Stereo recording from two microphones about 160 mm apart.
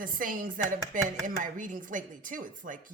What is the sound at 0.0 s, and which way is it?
Speech, 60° right (ahead or behind).